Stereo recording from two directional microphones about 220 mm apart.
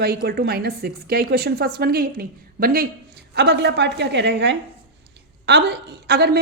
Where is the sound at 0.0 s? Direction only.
45° right (ahead or behind).